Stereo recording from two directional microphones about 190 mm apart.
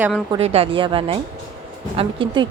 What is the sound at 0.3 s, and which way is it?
Speech, 30° right (ahead or behind).